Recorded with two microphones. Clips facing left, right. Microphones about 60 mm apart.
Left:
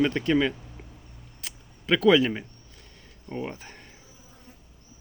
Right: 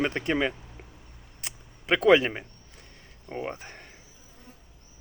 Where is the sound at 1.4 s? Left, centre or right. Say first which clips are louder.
Left 1 dB; right.